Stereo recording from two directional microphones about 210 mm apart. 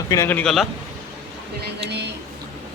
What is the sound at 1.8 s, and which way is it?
Speech, 55° right (ahead or behind).